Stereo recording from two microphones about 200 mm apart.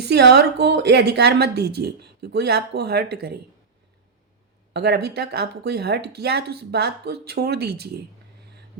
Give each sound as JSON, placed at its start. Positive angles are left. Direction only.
{"t": 0.0, "sound": "a woman's voice", "side_deg": -55}
{"t": 4.7, "sound": "a woman's voice", "side_deg": -55}